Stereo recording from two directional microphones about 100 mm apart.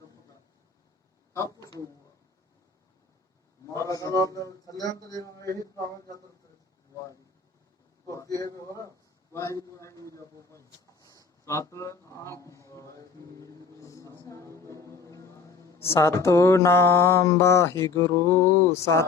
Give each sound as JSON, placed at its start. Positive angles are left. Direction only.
{"t": 1.3, "sound": "speech", "side_deg": 35}
{"t": 3.7, "sound": "a man's voice", "side_deg": 35}
{"t": 8.1, "sound": "a man's voice", "side_deg": 35}
{"t": 14.3, "sound": "music", "side_deg": 30}
{"t": 15.8, "sound": "mantra", "side_deg": 25}